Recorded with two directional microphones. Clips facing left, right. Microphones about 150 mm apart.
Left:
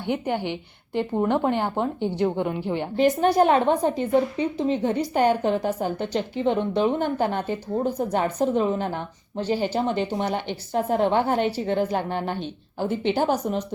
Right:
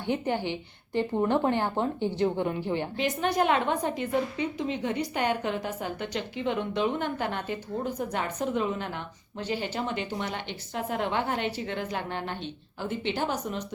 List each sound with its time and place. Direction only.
0.0 s a woman's voice: 15° left (ahead or behind)
3.0 s a woman's voice: 35° left (ahead or behind)